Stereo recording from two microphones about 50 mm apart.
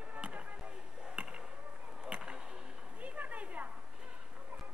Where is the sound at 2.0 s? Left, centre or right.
Centre.